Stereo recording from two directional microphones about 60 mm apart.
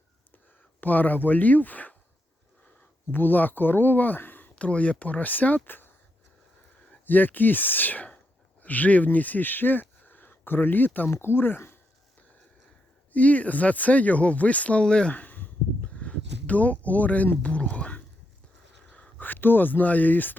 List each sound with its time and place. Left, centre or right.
0.8 s speech: left
3.1 s speech: left
4.5 s speech: left
6.9 s speech: left
10.0 s a sound: left
11.1 s speech: left
13.1 s speech: left
15.1 s a sound: left
18.9 s speech: left